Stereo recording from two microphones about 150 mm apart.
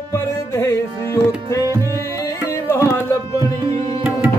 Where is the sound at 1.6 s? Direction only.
20° right (ahead or behind).